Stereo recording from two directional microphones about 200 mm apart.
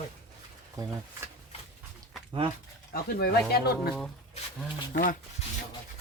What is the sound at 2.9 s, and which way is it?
Speech, 50° left (ahead or behind).